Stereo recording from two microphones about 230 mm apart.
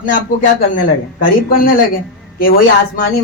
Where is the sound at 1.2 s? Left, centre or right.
Left.